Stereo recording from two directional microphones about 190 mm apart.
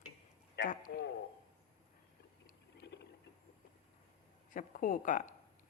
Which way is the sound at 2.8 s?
60° left (ahead or behind).